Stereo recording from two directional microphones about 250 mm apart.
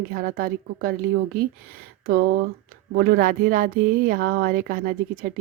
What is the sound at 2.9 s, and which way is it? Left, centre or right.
Speech, right.